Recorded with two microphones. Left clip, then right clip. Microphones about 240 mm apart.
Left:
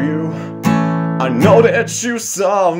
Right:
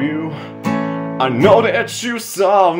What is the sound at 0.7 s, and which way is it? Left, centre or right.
Music, left.